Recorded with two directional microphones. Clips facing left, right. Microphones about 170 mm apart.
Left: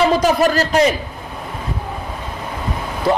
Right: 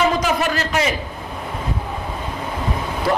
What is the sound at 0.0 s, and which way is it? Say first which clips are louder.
Speech: left 5 dB; 40° left (ahead or behind).